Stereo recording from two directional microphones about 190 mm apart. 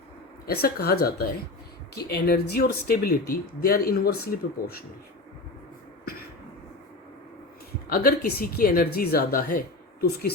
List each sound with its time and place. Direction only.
0.4 s speech: 55° left (ahead or behind)
7.9 s speech: 50° left (ahead or behind)